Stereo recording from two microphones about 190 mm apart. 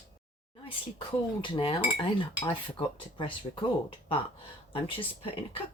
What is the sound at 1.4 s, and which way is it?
Speech, 25° left (ahead or behind).